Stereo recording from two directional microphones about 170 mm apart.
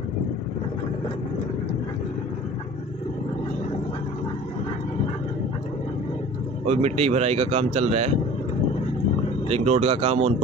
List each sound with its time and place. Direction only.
6.6 s speech: 40° right (ahead or behind)
9.5 s speech: 35° right (ahead or behind)